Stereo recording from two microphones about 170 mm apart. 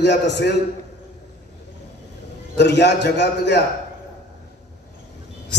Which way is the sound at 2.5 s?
90° left.